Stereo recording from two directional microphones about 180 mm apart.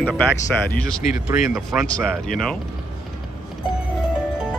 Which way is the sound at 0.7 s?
5° left (ahead or behind).